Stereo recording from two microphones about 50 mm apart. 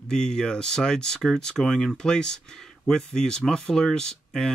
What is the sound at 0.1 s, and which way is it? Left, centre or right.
Speech, centre.